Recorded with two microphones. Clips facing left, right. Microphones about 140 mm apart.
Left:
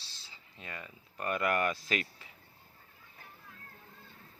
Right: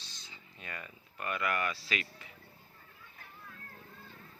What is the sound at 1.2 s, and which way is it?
Speech, 40° left (ahead or behind).